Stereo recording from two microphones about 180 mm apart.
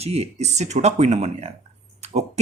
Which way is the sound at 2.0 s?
35° right (ahead or behind).